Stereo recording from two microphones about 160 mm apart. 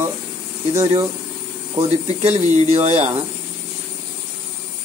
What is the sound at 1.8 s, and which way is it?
Speech, 40° right (ahead or behind).